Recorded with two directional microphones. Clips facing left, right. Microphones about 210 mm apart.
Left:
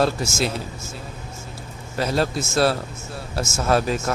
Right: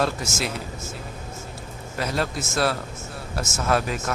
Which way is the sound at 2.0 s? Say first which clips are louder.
Left 4 dB; 30° left (ahead or behind).